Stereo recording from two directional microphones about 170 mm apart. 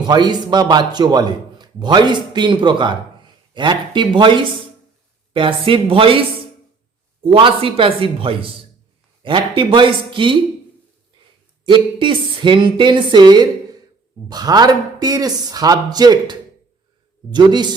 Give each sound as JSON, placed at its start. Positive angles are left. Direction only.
{"t": 0.0, "sound": "a man's voice", "side_deg": -25}
{"t": 11.6, "sound": "a man's voice", "side_deg": -30}